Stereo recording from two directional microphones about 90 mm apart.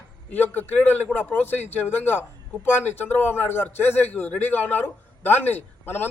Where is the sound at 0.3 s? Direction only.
20° left (ahead or behind).